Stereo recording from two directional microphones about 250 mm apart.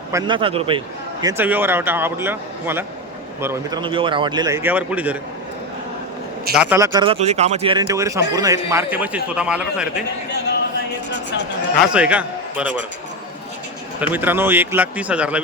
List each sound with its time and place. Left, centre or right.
0.1 s a man's voice: centre
1.2 s a man's voice: centre
6.6 s a man's voice: centre
11.8 s a man's voice: centre
14.0 s a man's voice: centre